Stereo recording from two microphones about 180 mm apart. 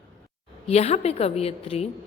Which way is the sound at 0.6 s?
35° left (ahead or behind).